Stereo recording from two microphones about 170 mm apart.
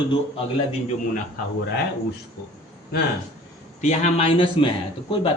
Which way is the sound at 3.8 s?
45° left (ahead or behind).